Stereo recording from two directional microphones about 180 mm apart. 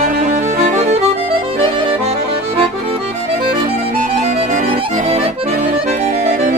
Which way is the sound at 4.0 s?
40° right (ahead or behind).